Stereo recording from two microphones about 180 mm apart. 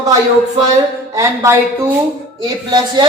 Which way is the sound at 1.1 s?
15° right (ahead or behind).